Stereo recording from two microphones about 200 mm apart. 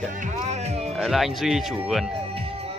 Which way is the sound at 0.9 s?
Centre (ahead or behind).